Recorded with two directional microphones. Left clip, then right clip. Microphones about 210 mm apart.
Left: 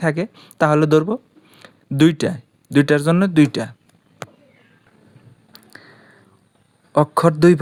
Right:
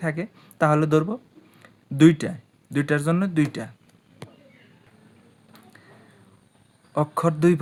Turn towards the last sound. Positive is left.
turn(degrees=35)  # may be behind; listen again after turning